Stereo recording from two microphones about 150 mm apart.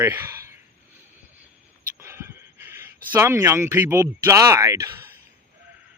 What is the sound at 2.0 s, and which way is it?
Speech, 15° right (ahead or behind).